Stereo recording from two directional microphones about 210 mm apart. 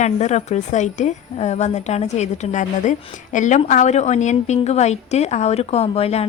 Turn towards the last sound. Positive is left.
turn(degrees=30)  # may be behind; listen again after turning